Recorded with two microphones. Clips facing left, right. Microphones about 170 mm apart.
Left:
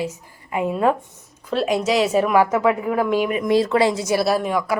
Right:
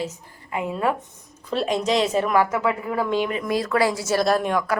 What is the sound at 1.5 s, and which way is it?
A woman's voice, 5° left (ahead or behind).